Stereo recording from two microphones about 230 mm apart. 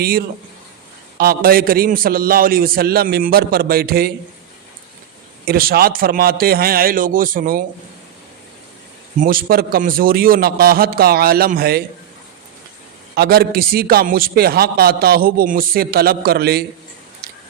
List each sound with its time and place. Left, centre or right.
0.0 s a man's voice: right
5.5 s a man's voice: right
9.1 s a man's voice: right
13.1 s a man's voice: right